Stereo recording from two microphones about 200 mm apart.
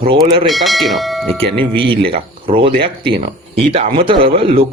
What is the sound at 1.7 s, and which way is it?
Speech, 25° right (ahead or behind).